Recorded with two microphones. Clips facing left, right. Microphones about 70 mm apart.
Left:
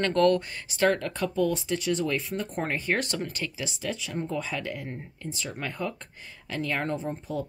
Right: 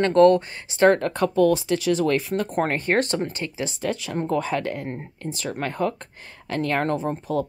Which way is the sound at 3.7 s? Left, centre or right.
Right.